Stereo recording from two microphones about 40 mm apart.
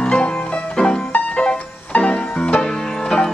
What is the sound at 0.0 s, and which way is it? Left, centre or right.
Music, left.